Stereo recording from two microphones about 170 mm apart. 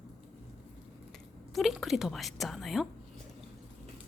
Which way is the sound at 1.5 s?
Centre (ahead or behind).